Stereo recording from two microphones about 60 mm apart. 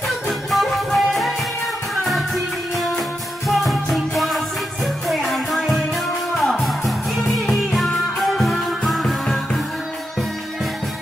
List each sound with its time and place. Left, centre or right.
0.3 s music: centre
2.7 s music: centre